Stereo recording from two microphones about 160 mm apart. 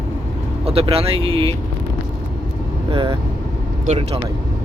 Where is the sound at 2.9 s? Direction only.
35° right (ahead or behind).